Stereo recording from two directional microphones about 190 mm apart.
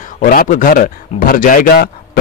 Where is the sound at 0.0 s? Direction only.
45° left (ahead or behind).